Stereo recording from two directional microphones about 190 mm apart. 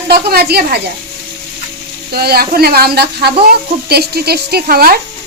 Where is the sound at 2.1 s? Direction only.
55° right (ahead or behind).